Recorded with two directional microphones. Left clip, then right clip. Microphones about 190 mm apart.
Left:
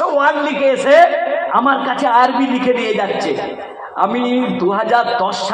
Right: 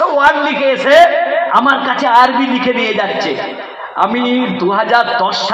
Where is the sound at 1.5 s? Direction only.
35° right (ahead or behind).